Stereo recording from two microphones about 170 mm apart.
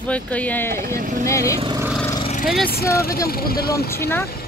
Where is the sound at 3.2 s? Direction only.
60° left (ahead or behind).